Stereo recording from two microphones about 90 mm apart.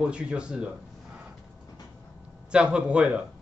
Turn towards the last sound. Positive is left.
turn(degrees=-10)  # may be behind; listen again after turning